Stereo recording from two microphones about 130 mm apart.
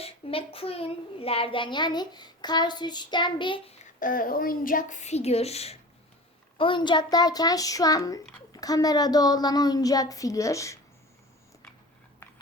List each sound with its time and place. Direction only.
0.0 s a child's voice: 45° left (ahead or behind)
4.0 s a woman's voice: 90° left; by 5.7 s 50° left (ahead or behind)
6.6 s a child's voice: 40° left (ahead or behind); by 10.8 s 25° left (ahead or behind)
12.2 s a sound: 15° left (ahead or behind)